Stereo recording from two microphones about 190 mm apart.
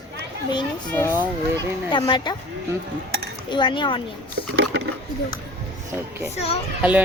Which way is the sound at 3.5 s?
25° left (ahead or behind).